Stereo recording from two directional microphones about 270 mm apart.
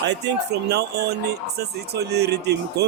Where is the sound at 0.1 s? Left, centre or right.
Right.